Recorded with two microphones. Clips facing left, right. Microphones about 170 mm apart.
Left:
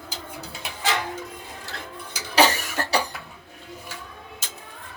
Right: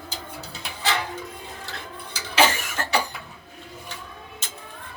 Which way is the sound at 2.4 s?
40° left (ahead or behind).